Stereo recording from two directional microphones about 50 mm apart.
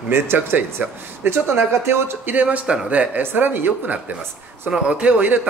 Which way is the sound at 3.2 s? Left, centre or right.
Right.